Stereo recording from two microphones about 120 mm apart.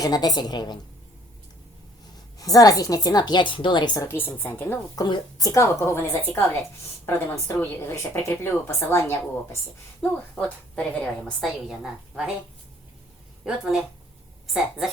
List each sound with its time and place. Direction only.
0.0 s a woman's voice: 30° left (ahead or behind)
2.4 s a woman's voice: 30° left (ahead or behind)
4.0 s a woman's voice: 20° left (ahead or behind)
4.9 s a woman's voice: 35° left (ahead or behind)
10.3 s a woman's voice: 10° left (ahead or behind)
11.3 s a woman's voice: centre (ahead or behind)
13.4 s a woman's voice: 5° right (ahead or behind)